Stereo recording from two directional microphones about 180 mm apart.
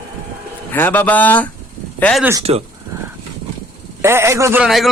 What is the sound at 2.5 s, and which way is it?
Speech, 30° right (ahead or behind).